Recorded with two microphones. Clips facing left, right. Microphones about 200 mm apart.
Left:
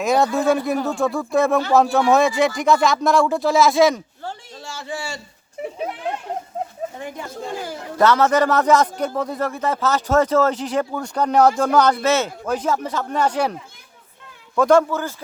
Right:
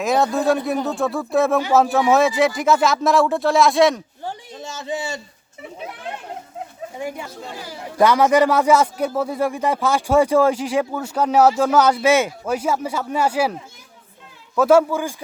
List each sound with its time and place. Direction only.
0.0 s speech: centre (ahead or behind)
4.2 s a sound: 15° right (ahead or behind)
7.9 s speech: 10° right (ahead or behind)